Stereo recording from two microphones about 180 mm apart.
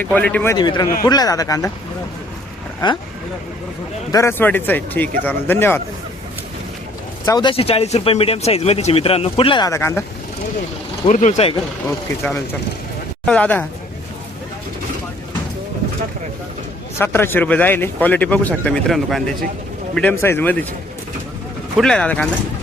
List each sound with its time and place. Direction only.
0.0 s speech: 10° left (ahead or behind)
0.5 s speech: 25° left (ahead or behind)
2.8 s speech: 25° left (ahead or behind)
4.1 s speech: 15° left (ahead or behind)
7.3 s speech: 25° left (ahead or behind)
11.1 s speech: 45° left (ahead or behind)
11.9 s speech: 15° left (ahead or behind)
17.0 s speech: 10° left (ahead or behind)
20.0 s speech: 10° left (ahead or behind)
21.8 s speech: 5° left (ahead or behind)